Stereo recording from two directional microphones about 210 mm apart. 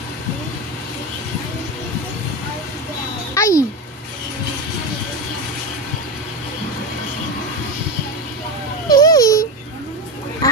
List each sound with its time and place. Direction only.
3.3 s a child's voice: 15° left (ahead or behind)
8.9 s babbling: 15° left (ahead or behind)